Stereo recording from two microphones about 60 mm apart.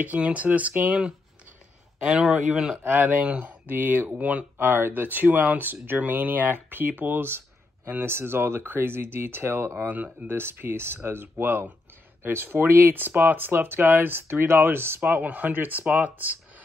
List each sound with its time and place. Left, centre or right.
0.0 s speech: right
2.0 s speech: centre
2.8 s speech: right
4.2 s speech: right
10.2 s speech: right
15.0 s speech: right